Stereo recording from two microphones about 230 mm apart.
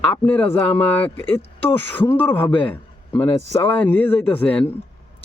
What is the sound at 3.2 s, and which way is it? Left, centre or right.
Speech, left.